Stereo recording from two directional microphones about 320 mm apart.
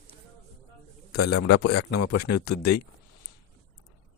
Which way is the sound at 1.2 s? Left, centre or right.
Left.